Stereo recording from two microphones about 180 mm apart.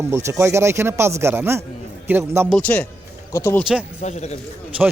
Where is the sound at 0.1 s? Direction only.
15° right (ahead or behind).